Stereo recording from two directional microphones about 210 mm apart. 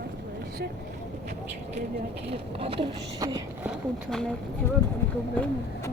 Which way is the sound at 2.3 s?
30° right (ahead or behind).